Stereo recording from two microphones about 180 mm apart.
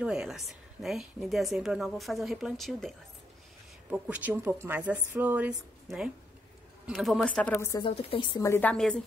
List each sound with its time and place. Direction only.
0.0 s a woman's voice: 5° right (ahead or behind)
3.9 s a woman's voice: 10° right (ahead or behind)
7.9 s a woman's voice: 30° left (ahead or behind)
8.5 s a woman's voice: 10° left (ahead or behind)